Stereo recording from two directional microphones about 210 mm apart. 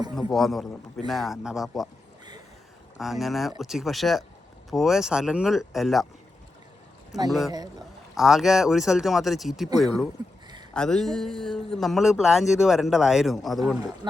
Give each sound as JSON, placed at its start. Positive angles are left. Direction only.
{"t": 0.2, "sound": "speech", "side_deg": 0}
{"t": 3.0, "sound": "speech", "side_deg": 0}
{"t": 7.3, "sound": "speech", "side_deg": 0}
{"t": 7.5, "sound": "speech", "side_deg": -20}
{"t": 8.1, "sound": "speech", "side_deg": 0}
{"t": 14.0, "sound": "speech", "side_deg": -20}